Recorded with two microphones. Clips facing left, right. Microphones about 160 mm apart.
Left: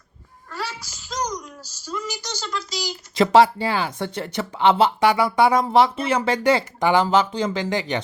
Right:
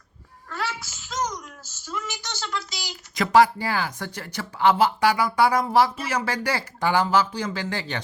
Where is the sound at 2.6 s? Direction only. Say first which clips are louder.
Left 8 dB; 40° left (ahead or behind).